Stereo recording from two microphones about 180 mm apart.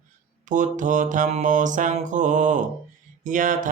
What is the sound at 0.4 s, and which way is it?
Mantra, 45° right (ahead or behind).